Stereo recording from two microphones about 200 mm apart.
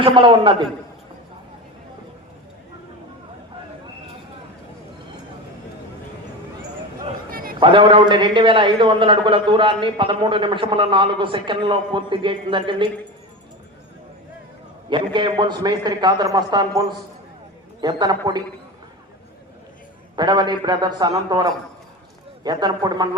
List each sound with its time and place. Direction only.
0.0 s a man's voice: 25° right (ahead or behind)
7.3 s a sound: 45° right (ahead or behind)
7.6 s a man's voice: 25° right (ahead or behind)
14.8 s a man's voice: 25° right (ahead or behind)
20.1 s a man's voice: 20° right (ahead or behind)